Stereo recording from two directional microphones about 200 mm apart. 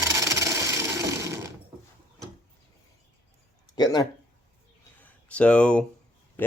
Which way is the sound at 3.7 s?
20° left (ahead or behind).